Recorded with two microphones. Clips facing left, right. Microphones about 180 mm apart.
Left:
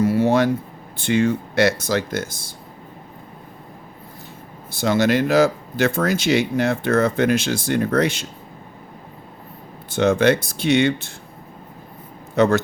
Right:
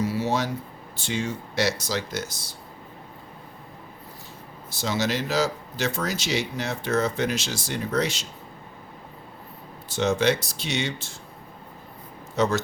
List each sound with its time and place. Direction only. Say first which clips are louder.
0.0 s a sound: left 8 dB; 55° left (ahead or behind)
0.9 s speech: left 10 dB; 60° left (ahead or behind)
4.7 s speech: left 8 dB; 55° left (ahead or behind)
9.9 s speech: left 6 dB; 55° left (ahead or behind)
12.4 s speech: left 7 dB; 60° left (ahead or behind)